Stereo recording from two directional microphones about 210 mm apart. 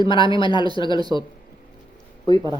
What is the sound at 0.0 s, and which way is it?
Speech, 25° left (ahead or behind).